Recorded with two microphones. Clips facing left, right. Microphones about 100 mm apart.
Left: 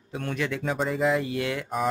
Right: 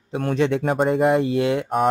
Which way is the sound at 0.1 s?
35° right (ahead or behind).